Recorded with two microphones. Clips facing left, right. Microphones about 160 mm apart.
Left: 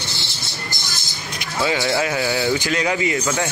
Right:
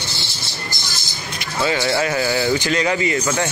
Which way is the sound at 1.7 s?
Centre (ahead or behind).